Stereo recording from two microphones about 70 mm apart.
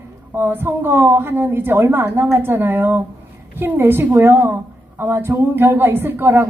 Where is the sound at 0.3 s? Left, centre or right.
Right.